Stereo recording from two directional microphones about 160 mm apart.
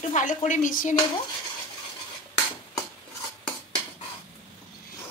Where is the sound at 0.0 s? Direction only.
50° left (ahead or behind).